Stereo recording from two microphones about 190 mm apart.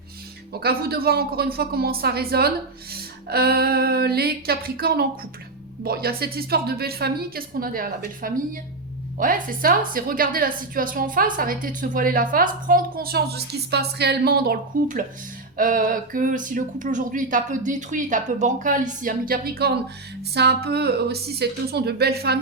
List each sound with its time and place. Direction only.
0.6 s a woman's voice: 55° right (ahead or behind)